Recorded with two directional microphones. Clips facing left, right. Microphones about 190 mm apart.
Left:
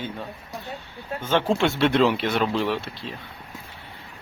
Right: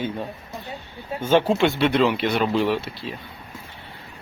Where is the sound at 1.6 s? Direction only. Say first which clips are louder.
Right 1 dB; centre (ahead or behind).